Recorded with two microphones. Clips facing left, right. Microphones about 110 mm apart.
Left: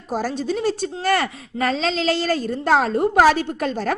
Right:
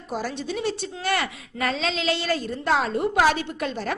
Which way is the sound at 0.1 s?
40° left (ahead or behind).